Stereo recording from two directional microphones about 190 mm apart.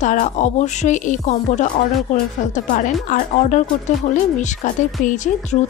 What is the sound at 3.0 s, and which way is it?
A woman's voice, 45° left (ahead or behind).